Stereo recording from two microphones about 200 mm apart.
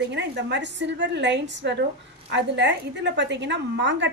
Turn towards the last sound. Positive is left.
turn(degrees=-60)  # may be behind; listen again after turning